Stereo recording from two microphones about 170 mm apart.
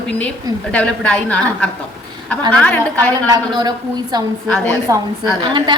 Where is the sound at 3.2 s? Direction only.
20° right (ahead or behind).